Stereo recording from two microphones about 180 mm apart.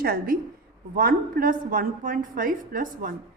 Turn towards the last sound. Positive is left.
turn(degrees=-50)  # may be behind; listen again after turning